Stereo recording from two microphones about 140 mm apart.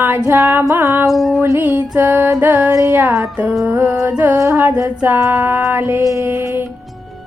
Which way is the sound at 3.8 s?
20° right (ahead or behind).